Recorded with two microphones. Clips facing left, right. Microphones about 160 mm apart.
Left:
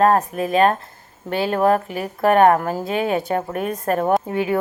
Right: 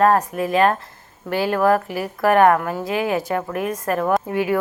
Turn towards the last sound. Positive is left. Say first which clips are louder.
# even
turn(degrees=25)  # may be behind; listen again after turning